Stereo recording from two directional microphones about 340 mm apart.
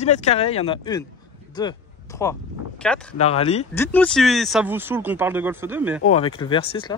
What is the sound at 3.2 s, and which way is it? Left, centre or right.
Speech, centre.